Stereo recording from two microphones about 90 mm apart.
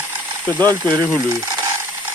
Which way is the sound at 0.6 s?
45° right (ahead or behind).